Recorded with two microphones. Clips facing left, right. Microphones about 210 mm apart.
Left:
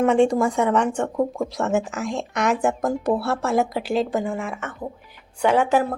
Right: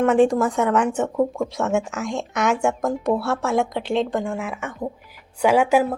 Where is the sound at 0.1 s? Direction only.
Centre (ahead or behind).